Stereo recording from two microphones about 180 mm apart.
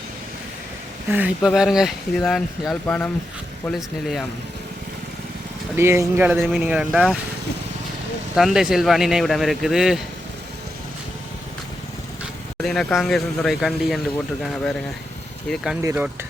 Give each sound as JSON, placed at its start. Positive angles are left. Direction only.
{"t": 1.1, "sound": "speech", "side_deg": -5}
{"t": 5.7, "sound": "speech", "side_deg": -15}
{"t": 8.4, "sound": "speech", "side_deg": 0}
{"t": 12.6, "sound": "speech", "side_deg": 0}
{"t": 15.4, "sound": "speech", "side_deg": 0}
{"t": 15.8, "sound": "speech", "side_deg": -15}